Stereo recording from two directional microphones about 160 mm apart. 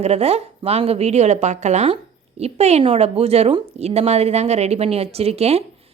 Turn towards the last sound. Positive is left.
turn(degrees=-40)  # may be behind; listen again after turning